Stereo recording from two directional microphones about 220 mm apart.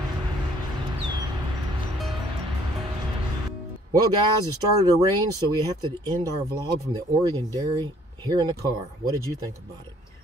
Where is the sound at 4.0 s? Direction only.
15° right (ahead or behind).